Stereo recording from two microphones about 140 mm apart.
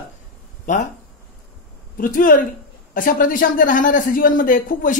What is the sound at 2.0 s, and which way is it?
A man's voice, 80° left.